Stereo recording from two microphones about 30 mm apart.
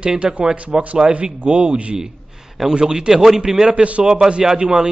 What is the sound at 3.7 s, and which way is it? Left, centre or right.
Speech, right.